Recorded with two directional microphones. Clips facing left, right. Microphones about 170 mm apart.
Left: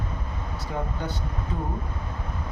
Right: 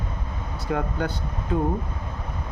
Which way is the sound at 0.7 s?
75° right (ahead or behind).